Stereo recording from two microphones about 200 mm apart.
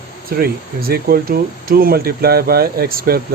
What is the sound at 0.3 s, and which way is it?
Speech, 50° right (ahead or behind).